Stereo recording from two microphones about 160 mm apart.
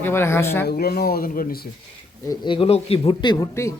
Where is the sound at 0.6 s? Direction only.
80° left.